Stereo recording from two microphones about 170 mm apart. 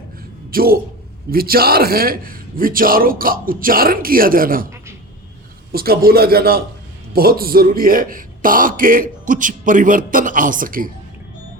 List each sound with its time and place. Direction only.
0.5 s a man's voice: 60° right (ahead or behind)
5.7 s a man's voice: 60° right (ahead or behind)